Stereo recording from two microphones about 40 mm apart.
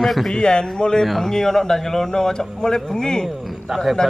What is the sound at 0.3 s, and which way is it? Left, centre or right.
Speech, left.